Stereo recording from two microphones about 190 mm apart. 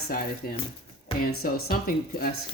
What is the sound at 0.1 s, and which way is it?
A woman's voice, 50° left (ahead or behind).